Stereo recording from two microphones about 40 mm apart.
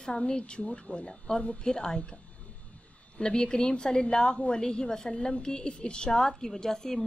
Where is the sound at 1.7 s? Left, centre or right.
Centre.